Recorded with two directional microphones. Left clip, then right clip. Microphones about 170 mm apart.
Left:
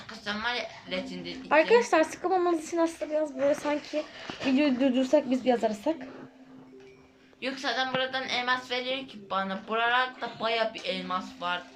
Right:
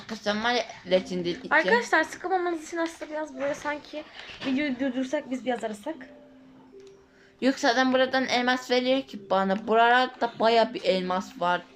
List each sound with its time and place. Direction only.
0.3 s a woman's voice: 35° right (ahead or behind)
1.5 s a woman's voice: 10° left (ahead or behind)
7.3 s a woman's voice: 40° right (ahead or behind)